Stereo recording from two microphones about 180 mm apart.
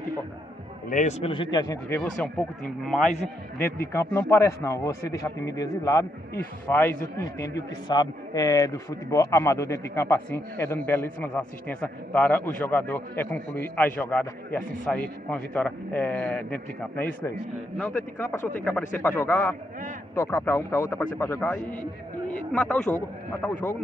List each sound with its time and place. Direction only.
0.8 s a man's voice: 45° left (ahead or behind)
1.2 s a man's voice: 30° left (ahead or behind)
1.9 s a man's voice: 10° left (ahead or behind)